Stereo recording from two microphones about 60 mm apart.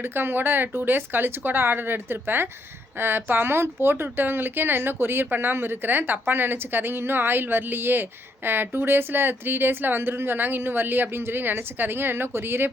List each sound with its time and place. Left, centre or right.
0.0 s speech: right